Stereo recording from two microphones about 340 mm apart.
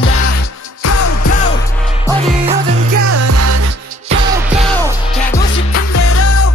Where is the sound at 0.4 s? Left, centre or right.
Left.